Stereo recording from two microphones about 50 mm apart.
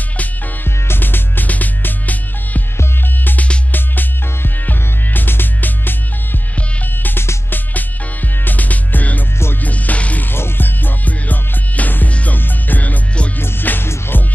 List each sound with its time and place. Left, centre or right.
0.8 s music: left
3.7 s music: left
7.0 s music: left
8.5 s music: left
10.3 s music: left
13.4 s music: left